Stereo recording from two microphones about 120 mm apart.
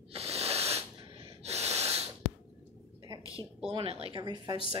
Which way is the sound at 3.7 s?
55° right (ahead or behind).